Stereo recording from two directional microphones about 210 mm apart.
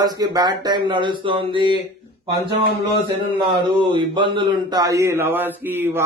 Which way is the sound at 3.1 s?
20° right (ahead or behind).